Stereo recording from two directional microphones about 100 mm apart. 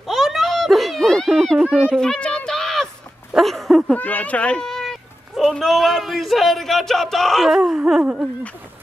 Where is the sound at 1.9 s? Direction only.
10° left (ahead or behind).